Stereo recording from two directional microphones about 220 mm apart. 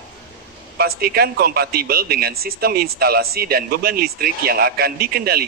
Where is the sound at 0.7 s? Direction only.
45° right (ahead or behind).